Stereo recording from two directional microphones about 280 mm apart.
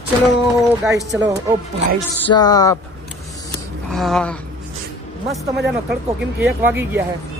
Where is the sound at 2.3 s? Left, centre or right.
Centre.